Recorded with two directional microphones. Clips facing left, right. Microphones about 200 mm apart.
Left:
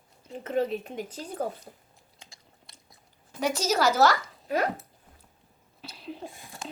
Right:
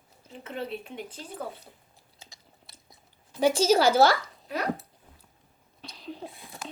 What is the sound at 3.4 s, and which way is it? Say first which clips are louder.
Speech: right 5 dB; 30° right (ahead or behind).